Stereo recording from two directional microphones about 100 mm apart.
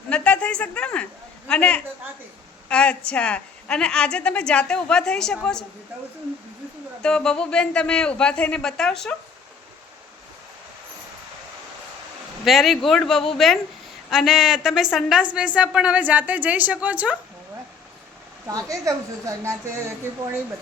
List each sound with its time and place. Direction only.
0.1 s a sound: 10° left (ahead or behind)
1.5 s a woman's voice: 10° left (ahead or behind)
7.0 s a woman's voice: 5° left (ahead or behind)
12.5 s a man's voice: centre (ahead or behind)
18.4 s a woman's voice: 35° right (ahead or behind)